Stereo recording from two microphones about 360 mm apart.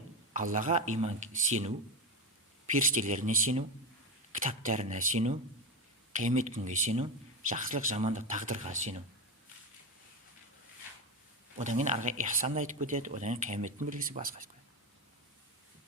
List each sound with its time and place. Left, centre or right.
0.3 s speech: right
2.9 s speech: right
11.5 s speech: centre